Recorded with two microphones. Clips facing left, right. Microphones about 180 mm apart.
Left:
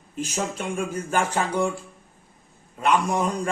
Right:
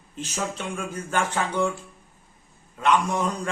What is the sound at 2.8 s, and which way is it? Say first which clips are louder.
Speech: left 1 dB; 10° left (ahead or behind).